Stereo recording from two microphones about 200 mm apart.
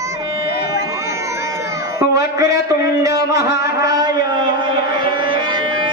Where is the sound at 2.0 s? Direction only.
15° right (ahead or behind).